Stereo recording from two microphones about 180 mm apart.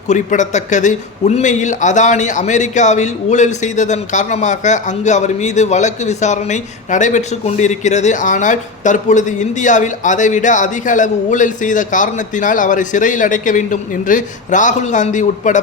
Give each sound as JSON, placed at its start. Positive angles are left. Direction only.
{"t": 0.1, "sound": "a man's voice", "side_deg": 40}